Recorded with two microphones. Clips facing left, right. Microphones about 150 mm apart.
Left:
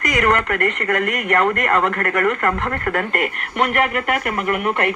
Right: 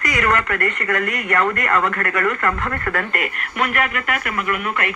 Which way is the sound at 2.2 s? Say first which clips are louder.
Left 1 dB; 20° left (ahead or behind).